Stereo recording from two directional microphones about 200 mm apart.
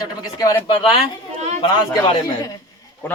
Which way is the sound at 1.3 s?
35° right (ahead or behind).